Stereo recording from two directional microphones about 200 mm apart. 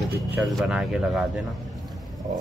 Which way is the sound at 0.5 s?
5° right (ahead or behind).